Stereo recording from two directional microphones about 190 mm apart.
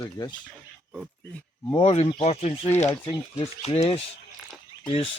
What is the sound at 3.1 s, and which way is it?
Speech, 20° left (ahead or behind).